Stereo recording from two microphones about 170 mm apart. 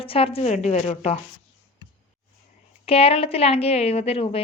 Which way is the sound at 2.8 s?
35° left (ahead or behind).